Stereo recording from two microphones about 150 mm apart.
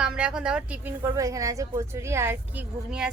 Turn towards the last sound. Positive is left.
turn(degrees=-10)  # may be behind; listen again after turning